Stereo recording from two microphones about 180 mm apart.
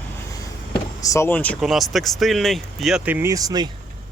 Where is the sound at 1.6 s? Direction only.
Centre (ahead or behind).